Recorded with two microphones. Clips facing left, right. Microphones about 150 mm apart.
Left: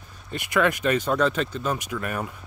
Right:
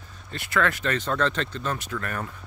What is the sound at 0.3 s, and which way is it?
Speech, 15° left (ahead or behind).